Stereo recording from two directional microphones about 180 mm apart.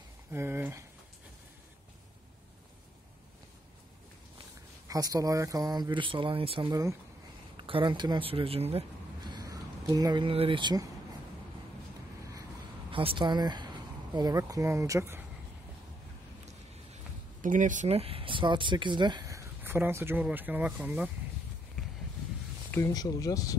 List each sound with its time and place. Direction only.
0.3 s speech: 15° right (ahead or behind)
4.8 s speech: 20° right (ahead or behind)
12.9 s speech: 30° right (ahead or behind)
16.9 s speech: 45° right (ahead or behind); by 21.1 s 10° right (ahead or behind)
22.7 s speech: 15° left (ahead or behind)